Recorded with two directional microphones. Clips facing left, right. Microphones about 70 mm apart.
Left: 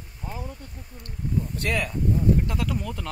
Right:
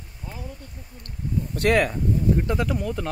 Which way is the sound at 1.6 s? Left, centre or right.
Right.